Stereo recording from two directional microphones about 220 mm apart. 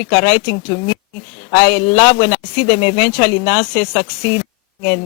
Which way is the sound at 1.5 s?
10° left (ahead or behind).